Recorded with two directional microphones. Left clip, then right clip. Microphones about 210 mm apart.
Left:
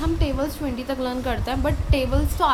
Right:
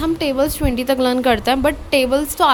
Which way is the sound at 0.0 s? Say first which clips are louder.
Right 7 dB; 50° right (ahead or behind).